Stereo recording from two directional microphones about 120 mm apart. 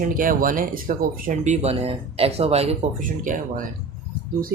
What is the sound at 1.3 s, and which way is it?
Speech, 75° right (ahead or behind).